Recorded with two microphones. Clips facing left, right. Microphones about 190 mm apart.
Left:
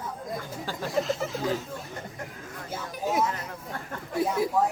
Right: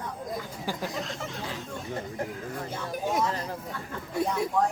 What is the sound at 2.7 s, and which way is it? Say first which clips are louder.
Speech: left 2 dB; 5° left (ahead or behind).